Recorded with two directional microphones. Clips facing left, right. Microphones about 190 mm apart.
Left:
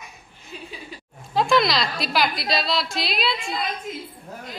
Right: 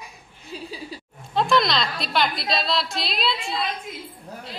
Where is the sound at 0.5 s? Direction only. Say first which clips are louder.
Right 3 dB; 35° right (ahead or behind).